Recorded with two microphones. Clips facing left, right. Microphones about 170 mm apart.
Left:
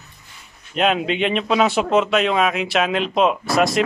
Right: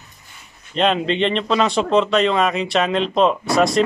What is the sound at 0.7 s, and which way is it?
Speech, 5° left (ahead or behind).